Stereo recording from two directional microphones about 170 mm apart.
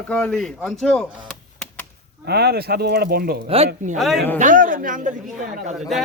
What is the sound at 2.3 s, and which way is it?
Speech, 70° right (ahead or behind).